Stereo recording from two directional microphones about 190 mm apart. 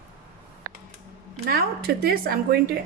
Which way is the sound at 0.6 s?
55° right (ahead or behind).